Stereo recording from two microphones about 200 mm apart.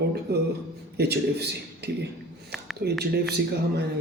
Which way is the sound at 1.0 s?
55° right (ahead or behind).